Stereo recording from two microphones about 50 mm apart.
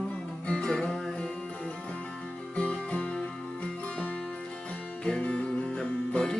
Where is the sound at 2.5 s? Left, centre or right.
Left.